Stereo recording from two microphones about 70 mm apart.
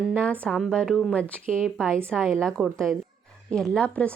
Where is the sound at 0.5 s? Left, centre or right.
Centre.